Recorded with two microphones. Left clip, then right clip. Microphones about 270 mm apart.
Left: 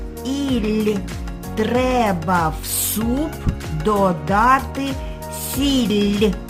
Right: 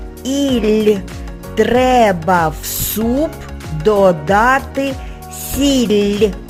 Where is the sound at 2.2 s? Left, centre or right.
Centre.